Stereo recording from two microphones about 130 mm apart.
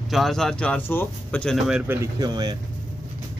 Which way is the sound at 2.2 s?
30° right (ahead or behind).